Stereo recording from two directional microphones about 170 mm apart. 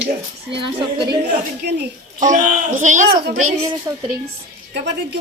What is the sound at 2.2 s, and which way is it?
Speech, 50° right (ahead or behind).